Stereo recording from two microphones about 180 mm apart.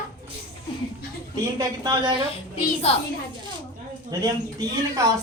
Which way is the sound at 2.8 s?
35° left (ahead or behind).